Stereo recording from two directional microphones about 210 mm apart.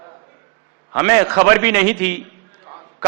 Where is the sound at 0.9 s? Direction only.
10° right (ahead or behind).